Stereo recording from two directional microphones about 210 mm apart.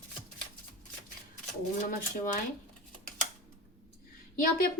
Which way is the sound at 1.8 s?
40° left (ahead or behind).